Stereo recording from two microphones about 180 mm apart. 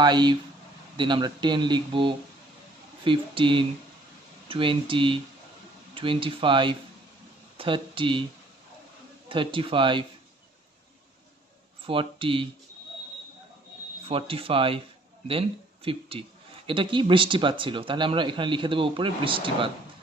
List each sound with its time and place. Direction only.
0.0 s speech: 25° right (ahead or behind)
9.3 s speech: 30° right (ahead or behind)
11.8 s speech: 30° right (ahead or behind)
14.0 s speech: 30° right (ahead or behind)